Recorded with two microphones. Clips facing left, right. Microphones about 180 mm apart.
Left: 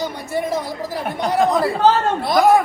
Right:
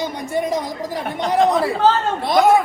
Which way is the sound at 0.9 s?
10° left (ahead or behind).